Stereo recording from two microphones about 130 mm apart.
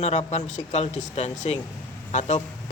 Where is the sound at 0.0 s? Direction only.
60° left (ahead or behind).